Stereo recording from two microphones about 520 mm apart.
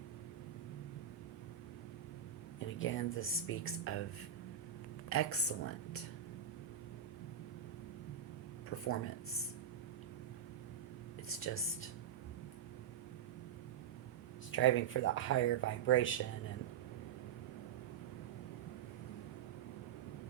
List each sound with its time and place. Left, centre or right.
2.6 s speech: left
5.0 s speech: left
8.7 s speech: left
11.3 s speech: left
14.5 s speech: left